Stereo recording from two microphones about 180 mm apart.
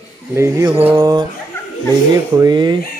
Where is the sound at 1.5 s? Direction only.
15° left (ahead or behind).